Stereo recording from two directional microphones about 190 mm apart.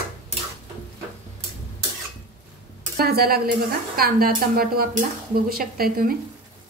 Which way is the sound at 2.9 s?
55° right (ahead or behind).